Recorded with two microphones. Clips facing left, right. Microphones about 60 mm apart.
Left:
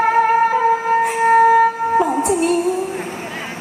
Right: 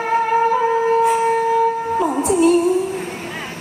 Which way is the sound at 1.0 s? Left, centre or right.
Left.